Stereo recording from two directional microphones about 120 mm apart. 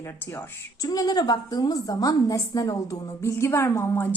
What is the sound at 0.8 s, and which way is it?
A woman's voice, 30° left (ahead or behind).